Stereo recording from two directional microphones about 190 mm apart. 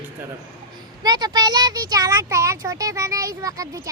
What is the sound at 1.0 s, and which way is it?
Speech, 20° right (ahead or behind).